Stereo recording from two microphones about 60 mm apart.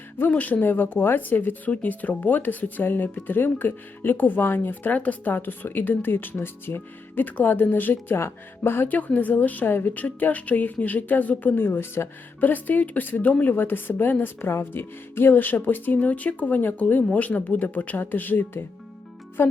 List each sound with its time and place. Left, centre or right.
0.3 s speech: left